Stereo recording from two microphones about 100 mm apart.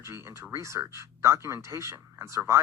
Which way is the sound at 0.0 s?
30° right (ahead or behind).